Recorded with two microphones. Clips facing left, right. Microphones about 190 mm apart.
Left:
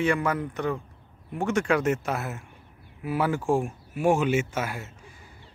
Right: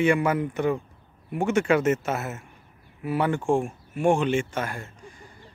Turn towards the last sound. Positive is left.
turn(degrees=5)  # may be behind; listen again after turning